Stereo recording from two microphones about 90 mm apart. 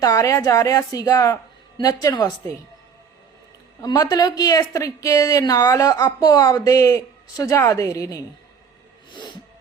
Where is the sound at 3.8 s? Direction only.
45° left (ahead or behind); by 7.7 s 30° left (ahead or behind).